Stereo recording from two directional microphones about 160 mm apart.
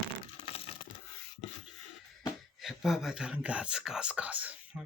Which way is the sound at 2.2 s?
Centre (ahead or behind).